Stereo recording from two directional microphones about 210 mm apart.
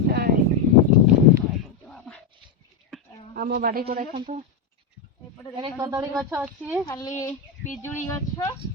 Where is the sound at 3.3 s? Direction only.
45° right (ahead or behind).